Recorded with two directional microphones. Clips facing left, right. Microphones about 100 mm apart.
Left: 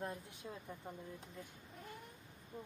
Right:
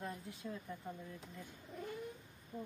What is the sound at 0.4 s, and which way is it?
Speech, 20° left (ahead or behind).